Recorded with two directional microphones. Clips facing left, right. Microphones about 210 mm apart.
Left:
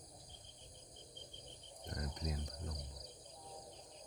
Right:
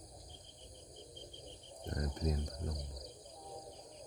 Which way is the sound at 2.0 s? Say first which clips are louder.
Right 6 dB; 45° right (ahead or behind).